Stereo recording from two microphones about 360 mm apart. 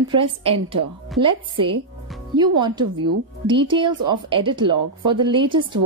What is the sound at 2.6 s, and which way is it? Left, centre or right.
Speech, centre.